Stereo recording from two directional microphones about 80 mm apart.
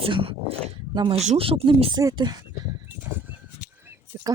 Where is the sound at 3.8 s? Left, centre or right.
Right.